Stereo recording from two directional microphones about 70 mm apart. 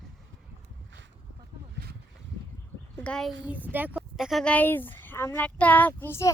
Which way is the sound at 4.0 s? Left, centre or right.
Centre.